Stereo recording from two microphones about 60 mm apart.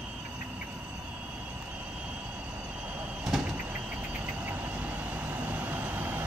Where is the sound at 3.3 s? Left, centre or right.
Centre.